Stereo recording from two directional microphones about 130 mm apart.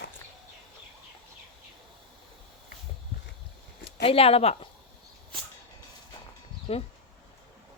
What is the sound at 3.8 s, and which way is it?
Speech, 45° left (ahead or behind).